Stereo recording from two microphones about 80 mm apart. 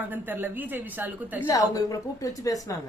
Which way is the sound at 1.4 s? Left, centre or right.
Left.